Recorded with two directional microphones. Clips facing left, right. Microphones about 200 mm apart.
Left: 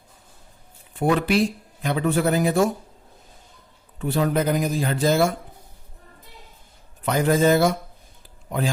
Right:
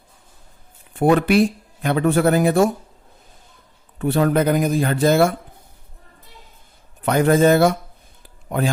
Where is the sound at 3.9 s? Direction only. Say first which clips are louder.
Right 4 dB; 55° right (ahead or behind).